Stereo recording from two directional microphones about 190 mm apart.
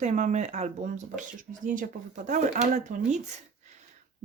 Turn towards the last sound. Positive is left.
turn(degrees=-40)  # may be behind; listen again after turning